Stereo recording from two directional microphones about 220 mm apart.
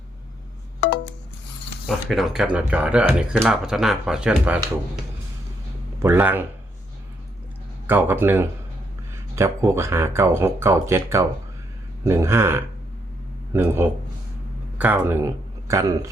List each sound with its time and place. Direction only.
0.8 s music: 50° left (ahead or behind)
1.9 s speech: centre (ahead or behind)
6.0 s speech: 10° right (ahead or behind)
7.9 s speech: 10° right (ahead or behind)